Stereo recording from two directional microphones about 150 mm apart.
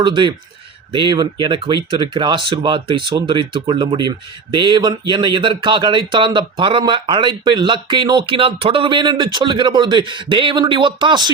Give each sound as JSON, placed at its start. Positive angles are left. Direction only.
{"t": 0.0, "sound": "speech", "side_deg": -30}